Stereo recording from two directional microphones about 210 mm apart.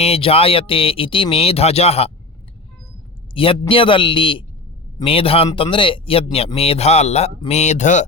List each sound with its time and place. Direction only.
0.0 s speech: 30° left (ahead or behind)
3.3 s speech: 25° left (ahead or behind)